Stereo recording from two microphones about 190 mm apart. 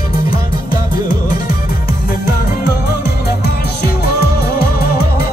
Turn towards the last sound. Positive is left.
turn(degrees=55)  # may be behind; listen again after turning